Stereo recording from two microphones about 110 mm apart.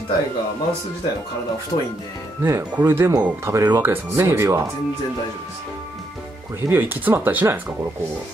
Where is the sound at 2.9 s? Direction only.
25° right (ahead or behind).